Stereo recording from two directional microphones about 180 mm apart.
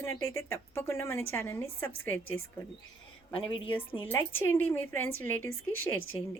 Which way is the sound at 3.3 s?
30° left (ahead or behind).